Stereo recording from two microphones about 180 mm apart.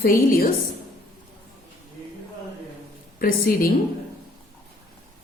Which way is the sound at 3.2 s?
55° left (ahead or behind).